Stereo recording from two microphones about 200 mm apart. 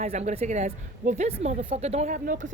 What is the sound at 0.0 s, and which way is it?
Speech, 35° right (ahead or behind).